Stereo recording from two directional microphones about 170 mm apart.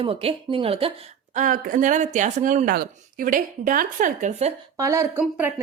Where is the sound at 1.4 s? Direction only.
55° right (ahead or behind).